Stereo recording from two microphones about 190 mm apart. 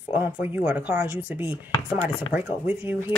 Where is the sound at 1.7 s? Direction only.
25° left (ahead or behind).